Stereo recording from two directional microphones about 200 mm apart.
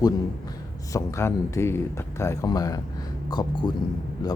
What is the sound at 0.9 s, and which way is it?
Speech, 15° left (ahead or behind).